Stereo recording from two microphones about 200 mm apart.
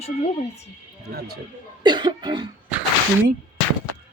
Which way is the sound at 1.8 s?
20° right (ahead or behind).